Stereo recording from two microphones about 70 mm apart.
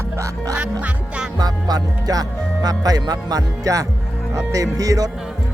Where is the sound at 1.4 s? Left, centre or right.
Right.